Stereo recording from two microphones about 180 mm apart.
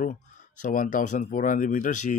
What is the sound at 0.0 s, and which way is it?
Speech, 45° left (ahead or behind).